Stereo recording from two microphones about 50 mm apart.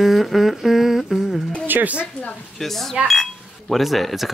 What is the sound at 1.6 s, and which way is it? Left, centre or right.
Speech, right.